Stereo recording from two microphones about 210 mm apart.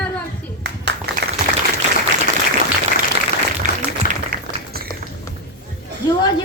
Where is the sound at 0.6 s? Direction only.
50° right (ahead or behind).